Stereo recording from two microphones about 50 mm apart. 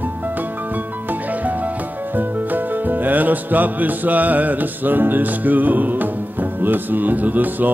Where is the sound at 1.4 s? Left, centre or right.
Right.